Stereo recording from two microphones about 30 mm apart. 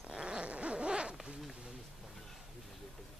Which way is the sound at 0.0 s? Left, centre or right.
Right.